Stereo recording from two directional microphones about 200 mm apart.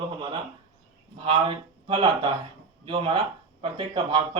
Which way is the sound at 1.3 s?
25° right (ahead or behind).